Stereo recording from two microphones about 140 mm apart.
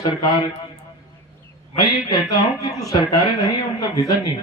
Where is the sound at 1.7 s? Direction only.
30° left (ahead or behind).